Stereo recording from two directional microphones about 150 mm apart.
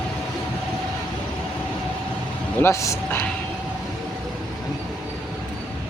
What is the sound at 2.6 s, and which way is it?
Speech, 20° left (ahead or behind).